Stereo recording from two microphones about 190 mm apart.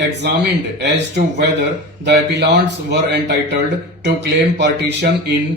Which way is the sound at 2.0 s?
65° right (ahead or behind).